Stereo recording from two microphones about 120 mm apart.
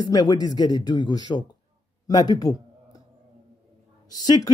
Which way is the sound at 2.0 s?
35° left (ahead or behind).